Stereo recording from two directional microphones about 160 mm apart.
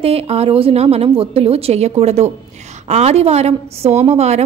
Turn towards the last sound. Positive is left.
turn(degrees=-40)  # may be behind; listen again after turning